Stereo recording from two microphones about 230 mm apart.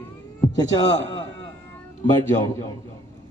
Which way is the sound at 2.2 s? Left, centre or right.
Centre.